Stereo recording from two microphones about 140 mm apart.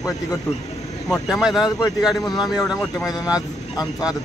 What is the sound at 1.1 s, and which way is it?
Speech, centre (ahead or behind).